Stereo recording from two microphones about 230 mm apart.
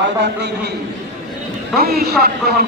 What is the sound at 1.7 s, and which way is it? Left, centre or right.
Speech, right.